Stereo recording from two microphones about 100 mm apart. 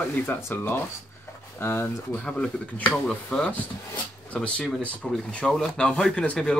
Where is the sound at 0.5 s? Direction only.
20° left (ahead or behind).